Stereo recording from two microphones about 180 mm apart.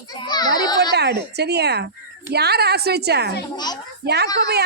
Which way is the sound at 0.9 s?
65° right (ahead or behind).